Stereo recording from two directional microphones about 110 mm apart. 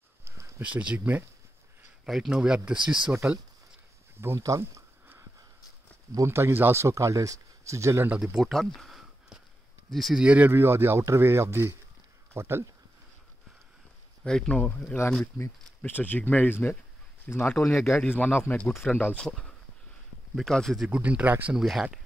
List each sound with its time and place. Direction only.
0.2 s a sound: 20° right (ahead or behind)
2.0 s speech: 5° right (ahead or behind)
4.2 s a sound: 25° right (ahead or behind)
6.1 s speech: 25° right (ahead or behind)
8.1 s speech: 10° right (ahead or behind)
14.2 s speech: 5° left (ahead or behind)
19.2 s speech: 5° left (ahead or behind)